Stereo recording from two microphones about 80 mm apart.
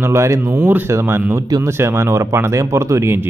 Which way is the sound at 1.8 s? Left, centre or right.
Right.